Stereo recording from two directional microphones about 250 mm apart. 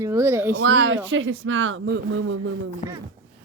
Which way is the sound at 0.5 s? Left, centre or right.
Right.